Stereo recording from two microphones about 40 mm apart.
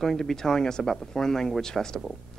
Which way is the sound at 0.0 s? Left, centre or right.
Centre.